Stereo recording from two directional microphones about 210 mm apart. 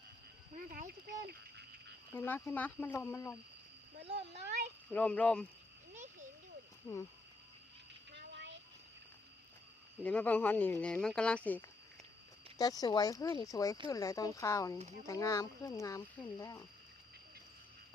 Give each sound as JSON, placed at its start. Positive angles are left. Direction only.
{"t": 0.5, "sound": "speech", "side_deg": -40}
{"t": 2.1, "sound": "speech", "side_deg": 10}
{"t": 4.3, "sound": "speech", "side_deg": -50}
{"t": 4.9, "sound": "speech", "side_deg": 5}
{"t": 5.9, "sound": "a sound", "side_deg": -35}
{"t": 6.8, "sound": "speech", "side_deg": 10}
{"t": 8.1, "sound": "a sound", "side_deg": -55}
{"t": 10.0, "sound": "speech", "side_deg": 5}
{"t": 12.5, "sound": "speech", "side_deg": 15}